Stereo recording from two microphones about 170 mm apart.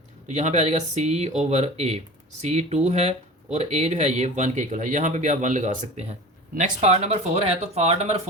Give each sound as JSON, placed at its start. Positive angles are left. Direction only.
{"t": 0.3, "sound": "speech", "side_deg": -40}